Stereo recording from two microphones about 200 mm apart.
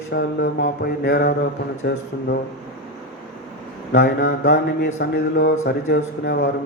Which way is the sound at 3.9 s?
55° left (ahead or behind).